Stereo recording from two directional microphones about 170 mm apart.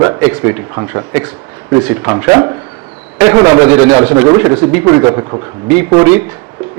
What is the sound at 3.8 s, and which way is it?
Speech, 35° right (ahead or behind).